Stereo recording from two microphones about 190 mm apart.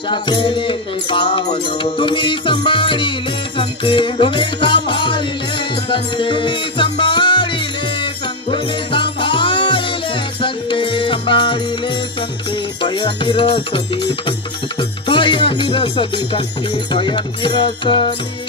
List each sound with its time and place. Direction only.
0.1 s music: 25° left (ahead or behind)
12.8 s music: 25° left (ahead or behind)